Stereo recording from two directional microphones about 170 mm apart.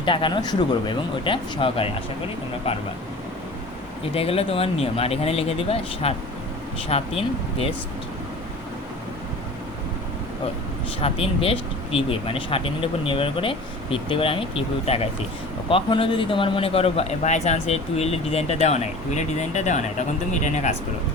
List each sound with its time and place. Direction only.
0.0 s speech: 30° left (ahead or behind)
4.1 s speech: 35° left (ahead or behind)
11.0 s speech: 35° left (ahead or behind)